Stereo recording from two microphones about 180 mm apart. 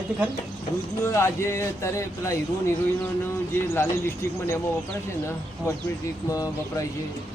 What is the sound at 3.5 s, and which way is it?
Speech, 15° left (ahead or behind).